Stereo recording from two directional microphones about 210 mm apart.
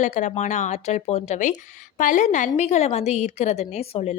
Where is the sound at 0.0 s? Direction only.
35° left (ahead or behind).